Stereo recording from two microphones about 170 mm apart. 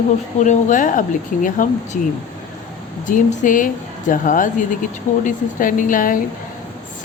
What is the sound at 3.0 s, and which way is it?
A woman's voice, 50° left (ahead or behind).